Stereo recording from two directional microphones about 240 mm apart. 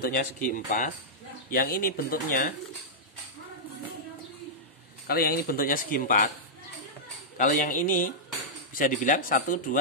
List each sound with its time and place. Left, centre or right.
0.0 s speech: left
5.0 s speech: left
7.3 s speech: left